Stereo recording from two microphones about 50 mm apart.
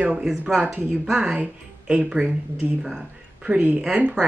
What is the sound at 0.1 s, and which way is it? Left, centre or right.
Speech, centre.